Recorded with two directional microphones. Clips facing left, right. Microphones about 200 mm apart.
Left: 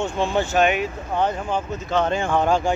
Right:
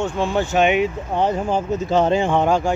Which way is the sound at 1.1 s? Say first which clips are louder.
Right 3 dB; 35° right (ahead or behind).